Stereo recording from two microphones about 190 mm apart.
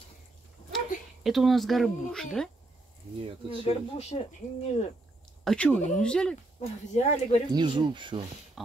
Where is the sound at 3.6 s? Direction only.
35° left (ahead or behind).